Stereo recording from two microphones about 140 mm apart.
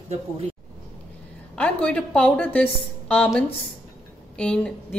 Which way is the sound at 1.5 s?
10° left (ahead or behind).